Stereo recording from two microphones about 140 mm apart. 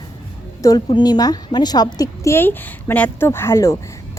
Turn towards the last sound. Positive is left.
turn(degrees=20)  # may be behind; listen again after turning